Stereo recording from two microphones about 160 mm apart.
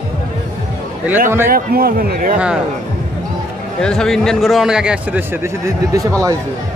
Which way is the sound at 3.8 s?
5° left (ahead or behind).